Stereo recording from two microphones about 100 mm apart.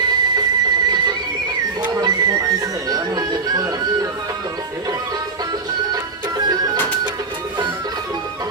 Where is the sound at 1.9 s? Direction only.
40° right (ahead or behind).